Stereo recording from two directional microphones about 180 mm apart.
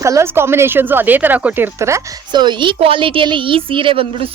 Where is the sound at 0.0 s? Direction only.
15° right (ahead or behind).